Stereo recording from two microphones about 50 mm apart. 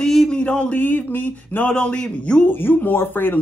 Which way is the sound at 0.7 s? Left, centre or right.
Left.